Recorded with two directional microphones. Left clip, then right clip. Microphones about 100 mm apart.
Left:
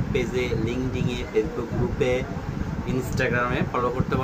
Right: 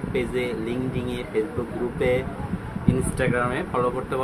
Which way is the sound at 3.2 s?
5° right (ahead or behind).